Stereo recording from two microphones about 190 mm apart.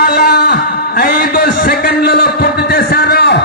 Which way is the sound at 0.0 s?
55° left (ahead or behind).